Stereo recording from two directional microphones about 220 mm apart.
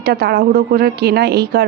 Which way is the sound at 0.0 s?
45° right (ahead or behind).